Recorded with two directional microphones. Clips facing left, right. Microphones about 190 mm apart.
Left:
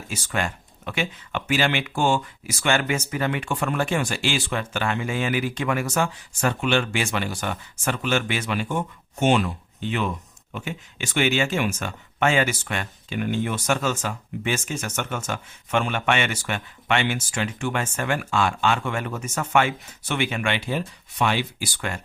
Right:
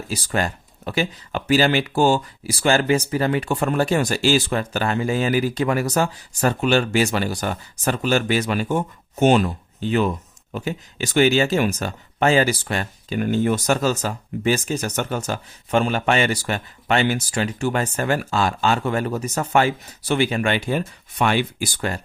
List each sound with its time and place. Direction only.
0.1 s speech: 35° right (ahead or behind); by 21.7 s 55° right (ahead or behind)
21.8 s speech: 35° right (ahead or behind)